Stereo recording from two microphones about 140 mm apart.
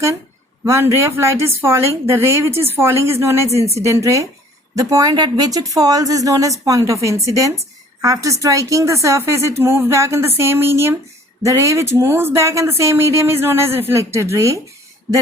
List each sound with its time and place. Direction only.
0.6 s speech: 20° right (ahead or behind)